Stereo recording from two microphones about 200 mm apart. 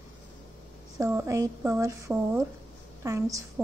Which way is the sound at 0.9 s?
15° right (ahead or behind).